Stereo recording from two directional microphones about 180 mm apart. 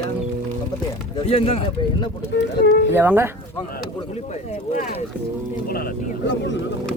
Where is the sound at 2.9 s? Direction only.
10° right (ahead or behind).